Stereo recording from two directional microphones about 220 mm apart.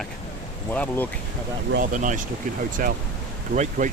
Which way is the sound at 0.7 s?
10° left (ahead or behind).